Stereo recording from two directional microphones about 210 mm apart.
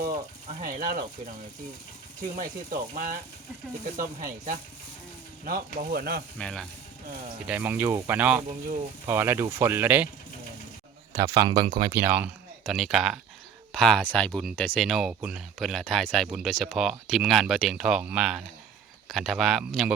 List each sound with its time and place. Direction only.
0.6 s speech: 40° right (ahead or behind)
2.3 s speech: 40° right (ahead or behind)
6.4 s speech: centre (ahead or behind)
11.1 s speech: 15° right (ahead or behind)
11.9 s speech: 10° right (ahead or behind)